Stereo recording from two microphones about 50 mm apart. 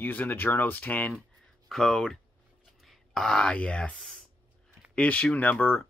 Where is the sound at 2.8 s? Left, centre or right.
Centre.